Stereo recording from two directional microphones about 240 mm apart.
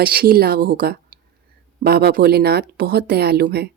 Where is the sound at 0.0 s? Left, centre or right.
Right.